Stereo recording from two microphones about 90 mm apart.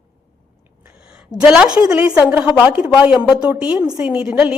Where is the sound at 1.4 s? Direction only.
10° right (ahead or behind).